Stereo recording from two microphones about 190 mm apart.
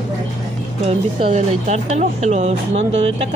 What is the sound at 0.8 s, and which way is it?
Speech, 35° right (ahead or behind).